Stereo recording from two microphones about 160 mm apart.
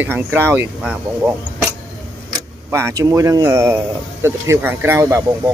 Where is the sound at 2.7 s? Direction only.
20° right (ahead or behind).